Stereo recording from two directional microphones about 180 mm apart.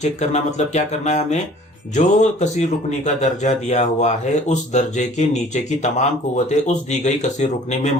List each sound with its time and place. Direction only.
0.0 s speech: 40° left (ahead or behind)